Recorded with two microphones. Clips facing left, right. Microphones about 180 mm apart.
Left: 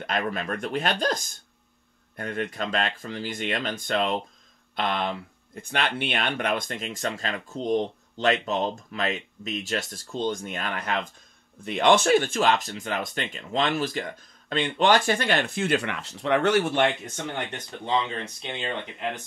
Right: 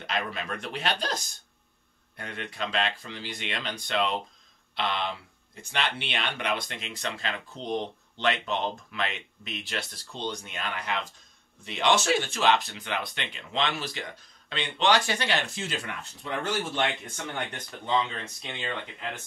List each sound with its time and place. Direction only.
0.0 s speech: 50° left (ahead or behind)
18.4 s speech: 25° left (ahead or behind)